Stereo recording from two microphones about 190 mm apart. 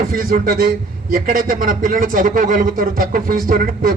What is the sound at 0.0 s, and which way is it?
A man's voice, 50° right (ahead or behind).